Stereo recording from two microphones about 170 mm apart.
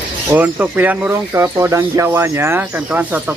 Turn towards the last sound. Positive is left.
turn(degrees=-10)  # may be behind; listen again after turning